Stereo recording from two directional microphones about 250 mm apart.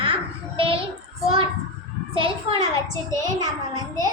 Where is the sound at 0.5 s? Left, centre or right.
Right.